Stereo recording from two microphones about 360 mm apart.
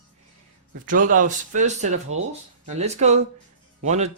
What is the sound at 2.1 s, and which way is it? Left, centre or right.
Speech, right.